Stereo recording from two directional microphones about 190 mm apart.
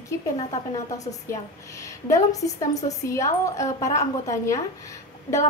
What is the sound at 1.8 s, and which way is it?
A woman's voice, 15° left (ahead or behind).